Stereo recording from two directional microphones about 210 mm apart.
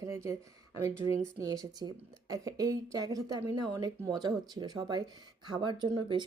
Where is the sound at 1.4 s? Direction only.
15° right (ahead or behind).